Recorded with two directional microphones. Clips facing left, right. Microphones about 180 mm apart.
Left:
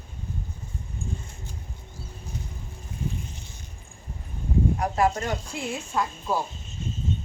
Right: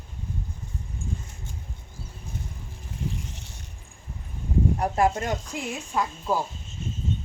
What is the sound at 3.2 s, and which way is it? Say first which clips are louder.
Boat: even; 85° right.